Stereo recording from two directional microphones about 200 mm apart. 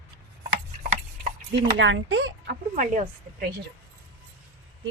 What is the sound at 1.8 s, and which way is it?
Speech, 70° right (ahead or behind).